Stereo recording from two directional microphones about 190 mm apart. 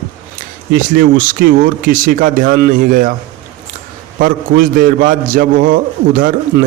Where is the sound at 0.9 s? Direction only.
45° right (ahead or behind).